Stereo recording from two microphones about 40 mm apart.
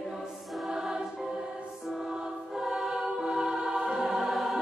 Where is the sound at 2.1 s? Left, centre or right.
Centre.